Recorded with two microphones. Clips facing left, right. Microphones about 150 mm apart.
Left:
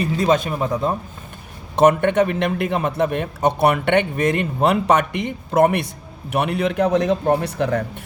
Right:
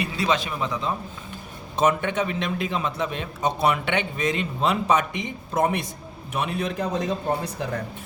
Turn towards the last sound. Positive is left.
turn(degrees=70)  # may be behind; listen again after turning